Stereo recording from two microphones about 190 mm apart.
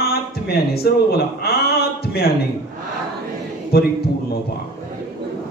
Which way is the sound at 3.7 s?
55° left (ahead or behind).